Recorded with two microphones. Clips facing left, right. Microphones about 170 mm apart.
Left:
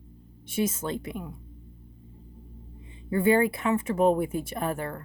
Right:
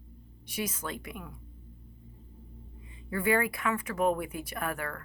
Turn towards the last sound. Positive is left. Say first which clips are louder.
# left 5 dB
turn(degrees=25)  # may be behind; listen again after turning